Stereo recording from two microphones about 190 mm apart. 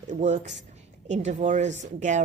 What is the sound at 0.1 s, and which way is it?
Speech, 40° right (ahead or behind).